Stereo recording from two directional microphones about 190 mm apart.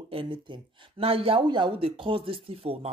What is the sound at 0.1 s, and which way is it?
A woman's voice, 25° right (ahead or behind).